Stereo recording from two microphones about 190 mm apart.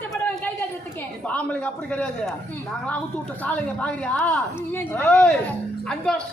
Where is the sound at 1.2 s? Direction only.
5° left (ahead or behind).